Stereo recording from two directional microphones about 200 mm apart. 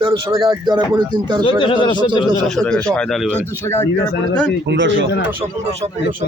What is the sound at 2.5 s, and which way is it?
Speech, 5° left (ahead or behind).